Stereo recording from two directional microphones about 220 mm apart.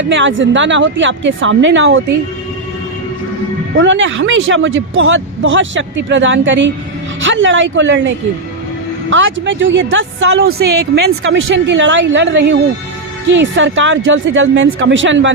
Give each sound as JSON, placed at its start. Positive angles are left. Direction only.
{"t": 0.0, "sound": "speech", "side_deg": -55}
{"t": 3.8, "sound": "speech", "side_deg": -60}